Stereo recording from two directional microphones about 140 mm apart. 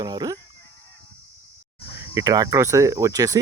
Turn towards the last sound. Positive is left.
turn(degrees=-25)  # may be behind; listen again after turning